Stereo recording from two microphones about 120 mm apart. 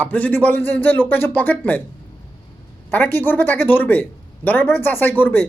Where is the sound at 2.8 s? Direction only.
15° left (ahead or behind).